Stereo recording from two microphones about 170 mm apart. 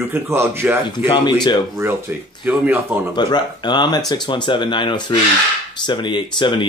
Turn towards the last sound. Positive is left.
turn(degrees=30)  # may be behind; listen again after turning